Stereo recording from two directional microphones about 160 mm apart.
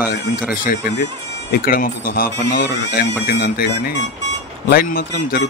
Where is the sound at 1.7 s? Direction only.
65° left (ahead or behind).